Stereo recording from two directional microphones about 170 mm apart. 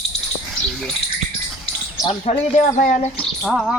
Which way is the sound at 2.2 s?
45° left (ahead or behind).